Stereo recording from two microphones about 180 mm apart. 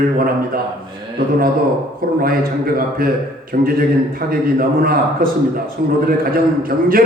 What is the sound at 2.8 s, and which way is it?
Speech, 55° right (ahead or behind).